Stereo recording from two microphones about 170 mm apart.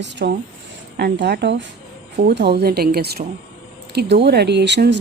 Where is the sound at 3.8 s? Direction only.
80° right.